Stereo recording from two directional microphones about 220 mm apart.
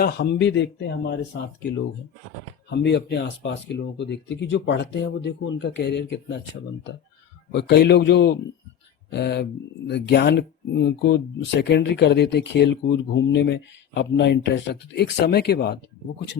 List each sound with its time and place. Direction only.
0.0 s speech: 50° left (ahead or behind)
2.6 s speech: 50° left (ahead or behind)
7.5 s speech: 50° left (ahead or behind)